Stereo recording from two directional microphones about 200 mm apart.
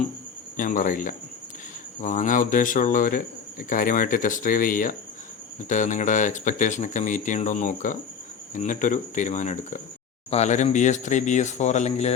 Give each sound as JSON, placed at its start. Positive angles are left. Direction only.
{"t": 0.5, "sound": "speech", "side_deg": 40}